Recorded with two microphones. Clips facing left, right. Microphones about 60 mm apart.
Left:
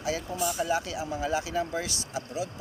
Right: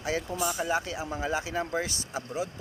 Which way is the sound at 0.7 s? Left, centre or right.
Right.